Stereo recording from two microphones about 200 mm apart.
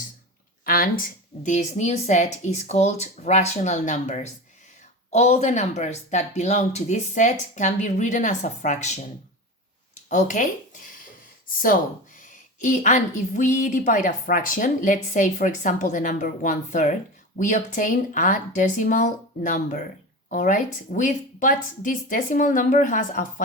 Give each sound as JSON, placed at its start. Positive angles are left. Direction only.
{"t": 0.6, "sound": "a sound", "side_deg": 45}
{"t": 1.5, "sound": "speech", "side_deg": 35}
{"t": 10.1, "sound": "speech", "side_deg": 40}
{"t": 11.4, "sound": "speech", "side_deg": 45}